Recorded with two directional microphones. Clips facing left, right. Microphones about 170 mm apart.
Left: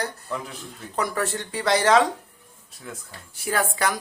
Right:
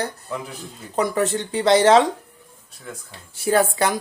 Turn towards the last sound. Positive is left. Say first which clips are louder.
# right 6 dB
turn(degrees=-25)  # may be behind; listen again after turning